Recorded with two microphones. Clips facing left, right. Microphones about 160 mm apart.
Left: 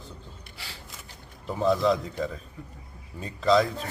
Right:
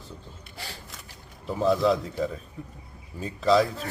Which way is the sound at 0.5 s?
45° right (ahead or behind).